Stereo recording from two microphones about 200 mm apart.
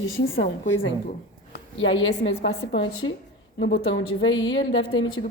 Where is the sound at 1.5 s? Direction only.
70° left (ahead or behind).